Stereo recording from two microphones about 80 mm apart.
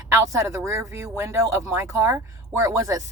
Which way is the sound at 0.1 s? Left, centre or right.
Right.